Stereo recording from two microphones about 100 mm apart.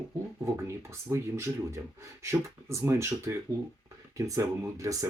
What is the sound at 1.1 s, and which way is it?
Speech, 30° right (ahead or behind).